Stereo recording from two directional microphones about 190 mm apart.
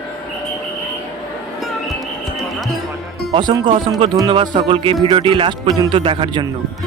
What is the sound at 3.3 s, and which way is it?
Speech, 25° right (ahead or behind).